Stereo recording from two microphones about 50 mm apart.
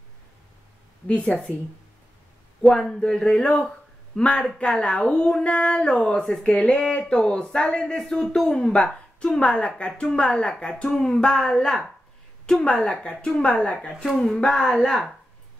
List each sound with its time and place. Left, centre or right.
1.0 s a woman's voice: centre
2.7 s a woman's voice: centre